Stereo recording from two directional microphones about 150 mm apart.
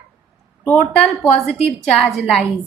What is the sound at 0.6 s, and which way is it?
Speech, 15° left (ahead or behind).